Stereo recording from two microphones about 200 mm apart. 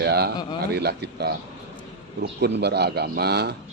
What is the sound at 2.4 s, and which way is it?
Speech, 55° right (ahead or behind).